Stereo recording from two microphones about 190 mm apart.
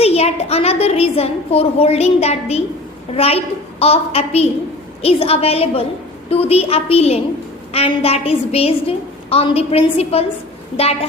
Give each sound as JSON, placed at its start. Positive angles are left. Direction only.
{"t": 0.0, "sound": "a woman's voice", "side_deg": 30}